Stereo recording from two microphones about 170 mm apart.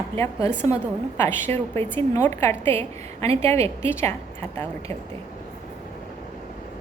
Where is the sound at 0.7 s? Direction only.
15° left (ahead or behind).